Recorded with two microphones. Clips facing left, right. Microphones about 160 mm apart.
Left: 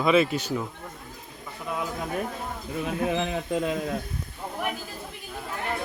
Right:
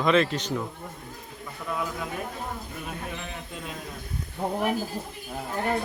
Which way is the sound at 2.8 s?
90° left.